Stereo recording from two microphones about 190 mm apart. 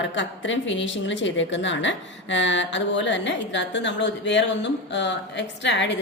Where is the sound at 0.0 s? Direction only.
75° left (ahead or behind).